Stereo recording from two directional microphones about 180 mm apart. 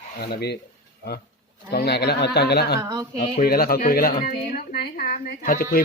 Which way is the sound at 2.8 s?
20° right (ahead or behind).